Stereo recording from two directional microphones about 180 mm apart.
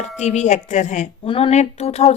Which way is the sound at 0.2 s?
40° left (ahead or behind).